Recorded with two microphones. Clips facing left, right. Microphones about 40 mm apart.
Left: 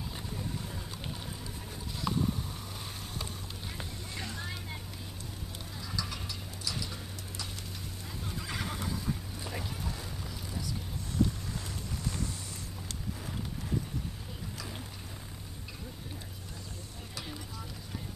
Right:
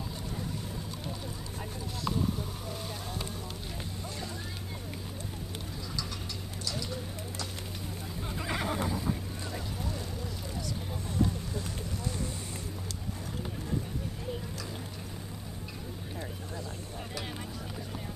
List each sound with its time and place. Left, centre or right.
8.4 s neigh: centre